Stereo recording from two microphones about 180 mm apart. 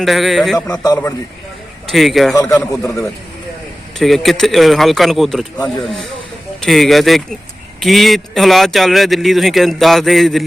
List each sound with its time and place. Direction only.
0.0 s a man's voice: centre (ahead or behind)
1.9 s a man's voice: centre (ahead or behind)
2.3 s a man's voice: 15° left (ahead or behind)
3.9 s a man's voice: centre (ahead or behind)